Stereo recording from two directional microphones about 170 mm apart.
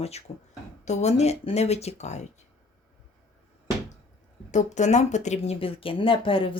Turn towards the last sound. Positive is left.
turn(degrees=30)  # may be behind; listen again after turning